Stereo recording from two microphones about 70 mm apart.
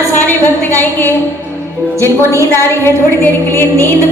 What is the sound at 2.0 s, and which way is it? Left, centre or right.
A woman's voice, left.